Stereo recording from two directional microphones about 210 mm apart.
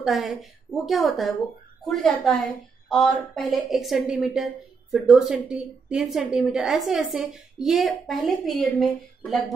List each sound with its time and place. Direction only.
0.0 s a woman's voice: centre (ahead or behind)